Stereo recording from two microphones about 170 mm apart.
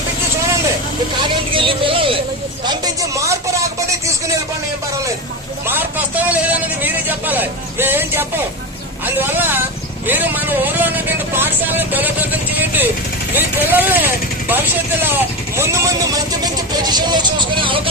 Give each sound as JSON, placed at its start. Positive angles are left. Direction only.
{"t": 1.2, "sound": "vehicle", "side_deg": -30}
{"t": 2.6, "sound": "a sound", "side_deg": -20}
{"t": 5.6, "sound": "a sound", "side_deg": -10}
{"t": 9.0, "sound": "speech", "side_deg": -10}
{"t": 10.1, "sound": "vehicle", "side_deg": -10}
{"t": 13.3, "sound": "speech", "side_deg": -10}